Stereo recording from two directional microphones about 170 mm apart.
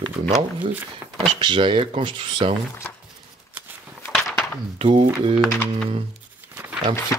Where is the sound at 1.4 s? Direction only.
30° right (ahead or behind).